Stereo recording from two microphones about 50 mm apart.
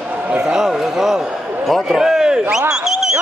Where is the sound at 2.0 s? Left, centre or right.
Centre.